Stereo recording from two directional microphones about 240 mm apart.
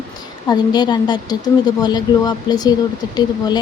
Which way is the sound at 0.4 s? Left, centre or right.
Centre.